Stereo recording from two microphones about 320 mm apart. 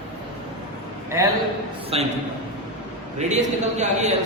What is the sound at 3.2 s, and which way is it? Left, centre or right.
Speech, right.